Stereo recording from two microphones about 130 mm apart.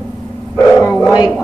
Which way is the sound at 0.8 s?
25° left (ahead or behind).